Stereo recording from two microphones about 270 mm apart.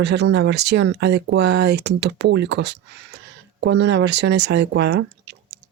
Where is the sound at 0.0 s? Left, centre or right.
Right.